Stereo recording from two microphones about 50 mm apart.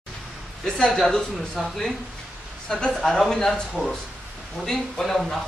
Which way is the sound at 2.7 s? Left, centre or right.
Centre.